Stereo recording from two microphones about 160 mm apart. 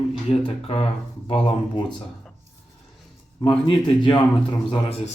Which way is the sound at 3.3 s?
30° left (ahead or behind).